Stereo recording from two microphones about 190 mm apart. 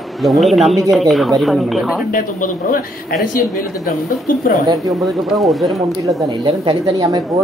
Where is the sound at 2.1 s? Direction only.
45° left (ahead or behind).